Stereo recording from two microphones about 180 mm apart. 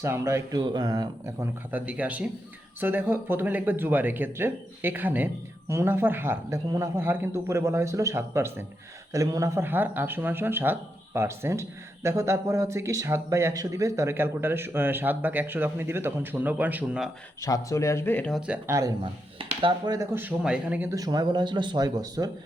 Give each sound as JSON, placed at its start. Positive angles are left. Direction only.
{"t": 0.0, "sound": "speech", "side_deg": -15}
{"t": 1.7, "sound": "speech", "side_deg": -10}
{"t": 17.4, "sound": "speech", "side_deg": 15}
{"t": 18.3, "sound": "speech", "side_deg": -5}
{"t": 19.4, "sound": "speech", "side_deg": -30}